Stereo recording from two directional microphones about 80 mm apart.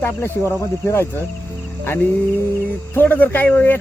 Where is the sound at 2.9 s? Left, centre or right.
Left.